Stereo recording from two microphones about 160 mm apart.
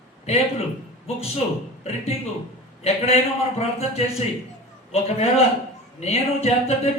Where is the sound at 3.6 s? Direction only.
40° left (ahead or behind).